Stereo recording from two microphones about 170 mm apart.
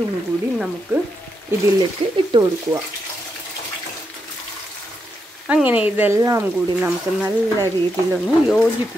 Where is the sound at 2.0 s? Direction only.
35° right (ahead or behind).